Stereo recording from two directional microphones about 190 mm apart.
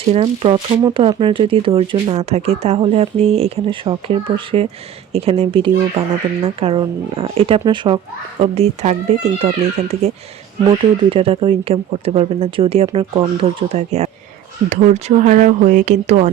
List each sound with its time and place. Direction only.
0.1 s speech: 30° right (ahead or behind)